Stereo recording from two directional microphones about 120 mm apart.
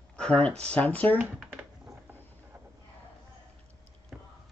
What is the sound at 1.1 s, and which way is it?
Speech, 10° right (ahead or behind).